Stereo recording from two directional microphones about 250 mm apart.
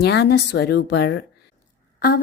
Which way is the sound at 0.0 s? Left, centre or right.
Left.